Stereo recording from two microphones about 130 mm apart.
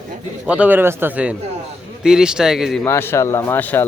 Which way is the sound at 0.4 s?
10° right (ahead or behind).